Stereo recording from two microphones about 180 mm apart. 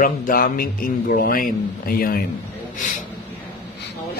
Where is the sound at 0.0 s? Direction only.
50° left (ahead or behind).